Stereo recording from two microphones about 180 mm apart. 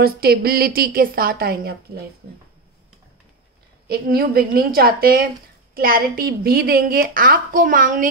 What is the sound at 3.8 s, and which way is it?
A woman's voice, 55° right (ahead or behind).